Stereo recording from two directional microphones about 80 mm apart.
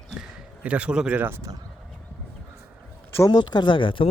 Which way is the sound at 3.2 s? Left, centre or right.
Left.